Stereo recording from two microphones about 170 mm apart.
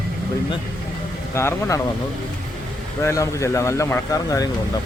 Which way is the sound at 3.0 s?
20° left (ahead or behind).